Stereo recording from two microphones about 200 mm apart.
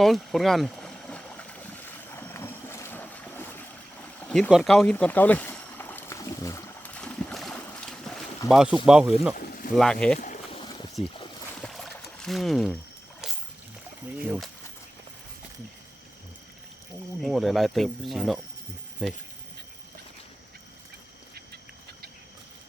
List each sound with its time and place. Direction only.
0.0 s boat: centre (ahead or behind)
8.4 s speech: 5° right (ahead or behind)
9.4 s a sound: 45° left (ahead or behind)
9.7 s speech: 5° left (ahead or behind)
10.2 s a sound: 40° left (ahead or behind)
10.5 s boat: 25° left (ahead or behind)
11.5 s pour: centre (ahead or behind)
13.2 s rowboat: 5° right (ahead or behind)
14.3 s speech: centre (ahead or behind)
17.2 s speech: centre (ahead or behind)